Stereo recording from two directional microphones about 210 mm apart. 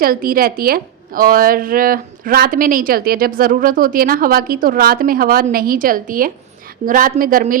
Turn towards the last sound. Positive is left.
turn(degrees=-40)  # may be behind; listen again after turning